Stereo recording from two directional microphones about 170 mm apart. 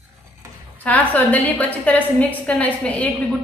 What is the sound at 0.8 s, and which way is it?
A woman's voice, 10° left (ahead or behind).